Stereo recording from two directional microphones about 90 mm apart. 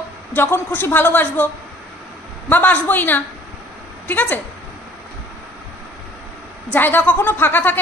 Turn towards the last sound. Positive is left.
turn(degrees=20)  # may be behind; listen again after turning